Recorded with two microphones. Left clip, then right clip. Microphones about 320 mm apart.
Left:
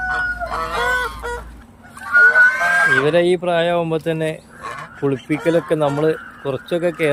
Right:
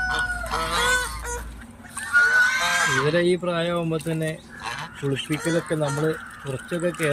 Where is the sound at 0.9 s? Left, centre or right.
Left.